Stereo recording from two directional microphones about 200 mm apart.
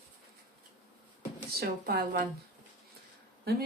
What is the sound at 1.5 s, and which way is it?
Speech, 50° right (ahead or behind).